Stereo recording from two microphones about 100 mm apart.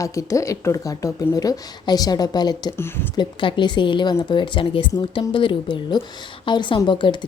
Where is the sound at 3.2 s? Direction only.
50° left (ahead or behind).